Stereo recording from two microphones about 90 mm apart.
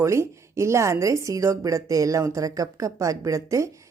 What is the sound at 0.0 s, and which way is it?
Speech, 35° right (ahead or behind).